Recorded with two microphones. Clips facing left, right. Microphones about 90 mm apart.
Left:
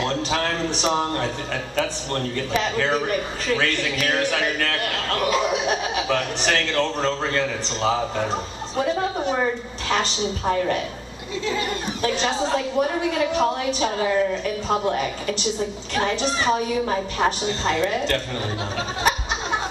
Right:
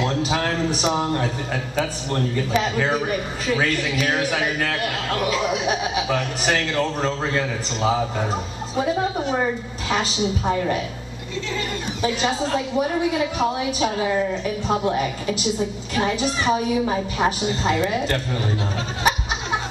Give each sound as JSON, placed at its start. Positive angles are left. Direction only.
{"t": 0.0, "sound": "a man's voice", "side_deg": -5}
{"t": 12.0, "sound": "a woman's voice", "side_deg": -5}